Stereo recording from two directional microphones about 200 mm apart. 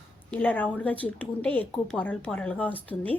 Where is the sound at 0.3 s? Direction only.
5° left (ahead or behind).